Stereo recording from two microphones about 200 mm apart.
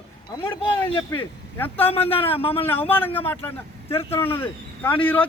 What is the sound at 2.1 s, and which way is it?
Speech, 30° left (ahead or behind).